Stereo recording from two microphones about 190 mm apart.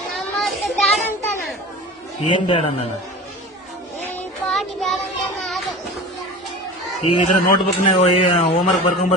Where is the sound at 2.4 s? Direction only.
30° left (ahead or behind).